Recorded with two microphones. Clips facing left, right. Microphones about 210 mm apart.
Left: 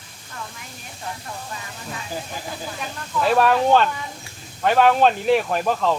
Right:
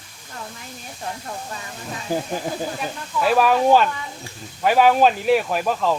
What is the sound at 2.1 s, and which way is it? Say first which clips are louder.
Speech: right 8 dB; 50° right (ahead or behind).